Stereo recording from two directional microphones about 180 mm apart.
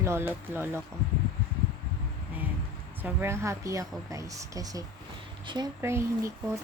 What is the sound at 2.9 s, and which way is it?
A woman's voice, 10° right (ahead or behind).